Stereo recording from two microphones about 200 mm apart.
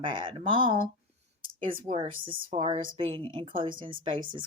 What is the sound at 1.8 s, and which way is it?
Speech, 25° right (ahead or behind).